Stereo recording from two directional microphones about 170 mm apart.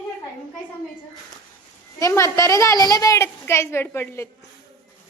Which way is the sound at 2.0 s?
20° left (ahead or behind).